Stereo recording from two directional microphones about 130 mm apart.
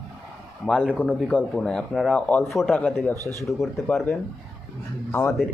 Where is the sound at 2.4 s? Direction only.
Centre (ahead or behind).